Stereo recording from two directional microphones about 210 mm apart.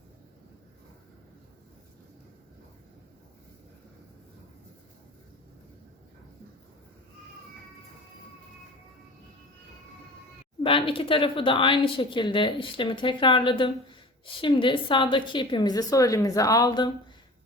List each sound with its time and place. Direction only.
10.6 s speech: 25° left (ahead or behind)